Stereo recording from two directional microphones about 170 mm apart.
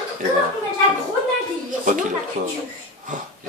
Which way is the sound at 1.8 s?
50° right (ahead or behind).